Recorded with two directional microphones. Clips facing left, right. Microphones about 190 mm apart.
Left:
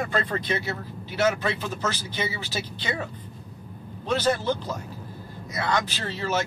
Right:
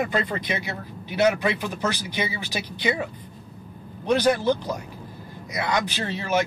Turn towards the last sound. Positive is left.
turn(degrees=-15)  # may be behind; listen again after turning